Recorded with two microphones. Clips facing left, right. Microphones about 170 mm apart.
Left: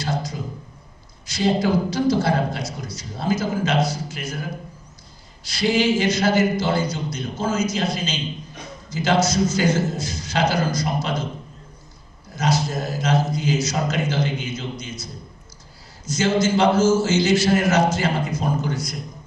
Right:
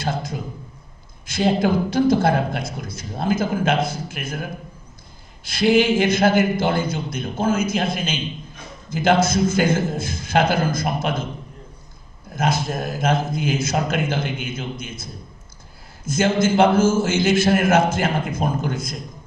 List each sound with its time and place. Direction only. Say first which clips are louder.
0.0 s a man's voice: right 1 dB; 55° right (ahead or behind)
12.4 s a man's voice: even; 55° right (ahead or behind)